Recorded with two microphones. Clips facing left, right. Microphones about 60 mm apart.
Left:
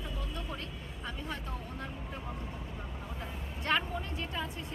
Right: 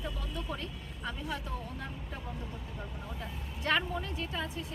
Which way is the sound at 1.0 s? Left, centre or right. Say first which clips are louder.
Right 2 dB; centre.